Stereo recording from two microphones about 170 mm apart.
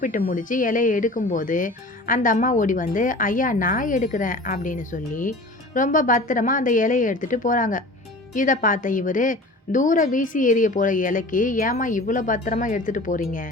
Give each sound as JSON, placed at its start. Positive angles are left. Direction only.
{"t": 0.0, "sound": "speech", "side_deg": 50}